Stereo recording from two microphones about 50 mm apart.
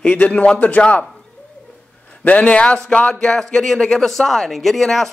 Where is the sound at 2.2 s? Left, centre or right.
Left.